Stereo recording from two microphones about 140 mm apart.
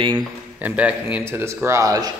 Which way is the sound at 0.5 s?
10° right (ahead or behind).